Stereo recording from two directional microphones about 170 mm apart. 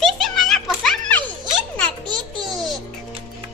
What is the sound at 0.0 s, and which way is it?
Music, centre (ahead or behind).